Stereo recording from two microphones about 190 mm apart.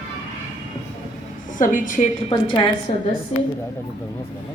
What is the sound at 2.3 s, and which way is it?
Speech, 30° left (ahead or behind).